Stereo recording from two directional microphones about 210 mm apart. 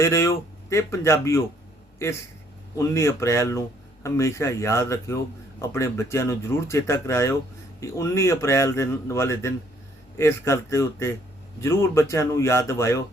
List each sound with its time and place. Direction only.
0.0 s a man's voice: 15° left (ahead or behind)